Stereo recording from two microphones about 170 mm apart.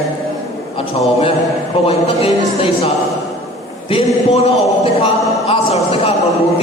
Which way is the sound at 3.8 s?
35° left (ahead or behind).